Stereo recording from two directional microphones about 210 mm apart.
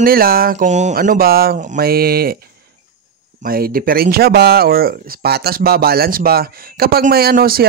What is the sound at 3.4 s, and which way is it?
Speech, 45° right (ahead or behind).